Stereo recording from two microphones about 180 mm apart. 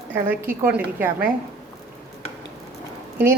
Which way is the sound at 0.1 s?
10° right (ahead or behind).